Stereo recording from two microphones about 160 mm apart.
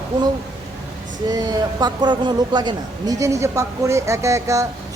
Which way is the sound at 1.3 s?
25° right (ahead or behind).